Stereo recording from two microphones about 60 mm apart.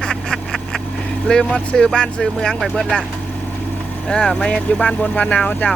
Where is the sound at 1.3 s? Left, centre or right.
Centre.